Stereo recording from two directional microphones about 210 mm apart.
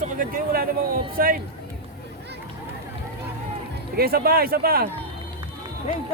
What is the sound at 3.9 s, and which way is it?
Speech, 45° right (ahead or behind).